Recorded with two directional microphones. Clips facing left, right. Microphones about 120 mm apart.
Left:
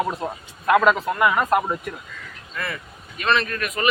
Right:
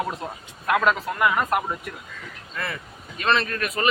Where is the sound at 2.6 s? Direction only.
30° right (ahead or behind).